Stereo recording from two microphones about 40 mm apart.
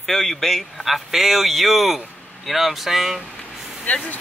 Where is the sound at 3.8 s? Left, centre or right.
Left.